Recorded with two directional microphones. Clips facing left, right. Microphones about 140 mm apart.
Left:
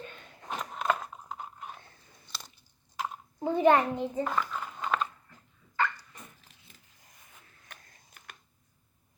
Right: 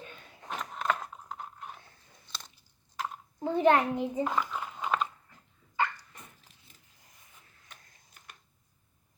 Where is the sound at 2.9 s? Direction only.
5° left (ahead or behind).